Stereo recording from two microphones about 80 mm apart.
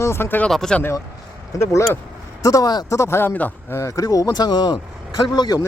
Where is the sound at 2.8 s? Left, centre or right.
Left.